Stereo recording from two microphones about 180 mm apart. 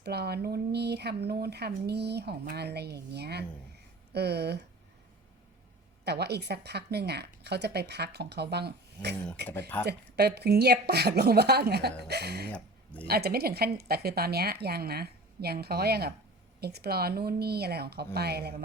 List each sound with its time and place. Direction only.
0.0 s speech: 65° right (ahead or behind)
6.1 s speech: 65° right (ahead or behind)
9.5 s speech: 10° left (ahead or behind)
9.8 s speech: 65° right (ahead or behind)
12.5 s speech: 5° left (ahead or behind)
13.1 s speech: 60° right (ahead or behind)